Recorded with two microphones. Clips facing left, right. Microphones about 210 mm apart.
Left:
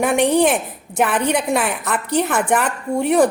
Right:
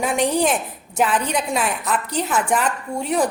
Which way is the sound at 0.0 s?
60° left (ahead or behind).